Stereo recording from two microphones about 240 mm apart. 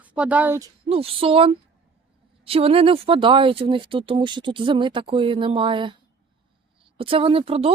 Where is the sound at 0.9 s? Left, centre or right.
Right.